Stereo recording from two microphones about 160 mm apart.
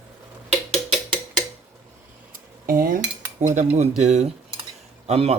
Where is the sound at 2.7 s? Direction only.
60° right (ahead or behind).